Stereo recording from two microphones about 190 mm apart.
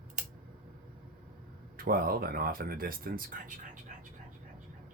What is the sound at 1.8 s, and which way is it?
Speech, 50° right (ahead or behind).